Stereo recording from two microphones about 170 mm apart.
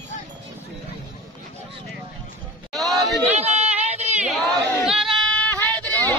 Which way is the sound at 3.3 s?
40° right (ahead or behind).